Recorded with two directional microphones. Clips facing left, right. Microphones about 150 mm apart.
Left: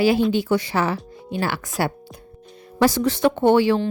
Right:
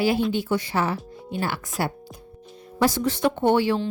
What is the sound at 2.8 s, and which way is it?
Speech, 90° left.